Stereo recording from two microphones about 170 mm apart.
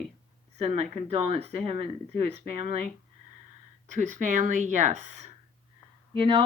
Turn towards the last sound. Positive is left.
turn(degrees=-30)  # may be behind; listen again after turning